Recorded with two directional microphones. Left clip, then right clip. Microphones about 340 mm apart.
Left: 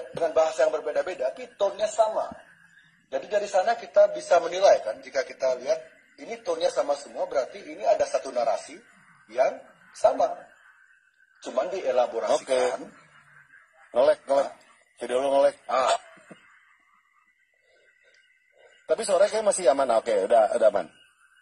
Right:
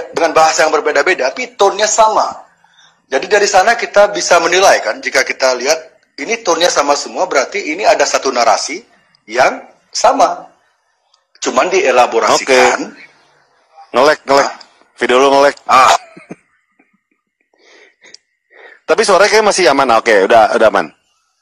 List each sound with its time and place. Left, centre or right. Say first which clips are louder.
0.1 s a man's voice: right 14 dB; right
11.3 s a man's voice: right 16 dB; right
13.9 s a man's voice: right 12 dB; right
18.9 s a man's voice: right 13 dB; right